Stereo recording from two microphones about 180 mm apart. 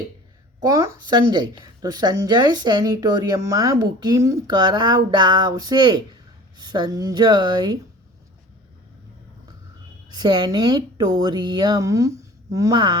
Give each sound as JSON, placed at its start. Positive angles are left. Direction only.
{"t": 0.6, "sound": "speech", "side_deg": -20}
{"t": 10.1, "sound": "speech", "side_deg": -25}